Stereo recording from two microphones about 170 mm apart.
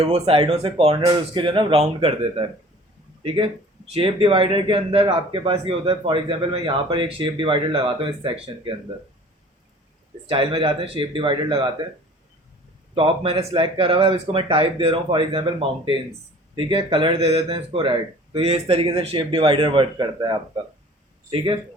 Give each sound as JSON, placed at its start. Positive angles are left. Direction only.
{"t": 0.0, "sound": "speech", "side_deg": -35}
{"t": 10.2, "sound": "speech", "side_deg": -30}
{"t": 12.9, "sound": "speech", "side_deg": -30}